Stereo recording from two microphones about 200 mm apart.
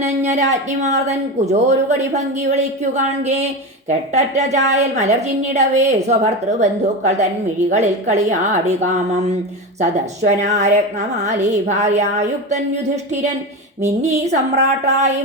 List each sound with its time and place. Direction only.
0.0 s speech: 35° right (ahead or behind)
14.3 s speech: 35° right (ahead or behind)